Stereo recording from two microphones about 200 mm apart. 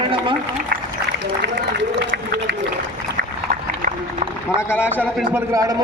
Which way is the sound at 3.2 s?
60° right (ahead or behind).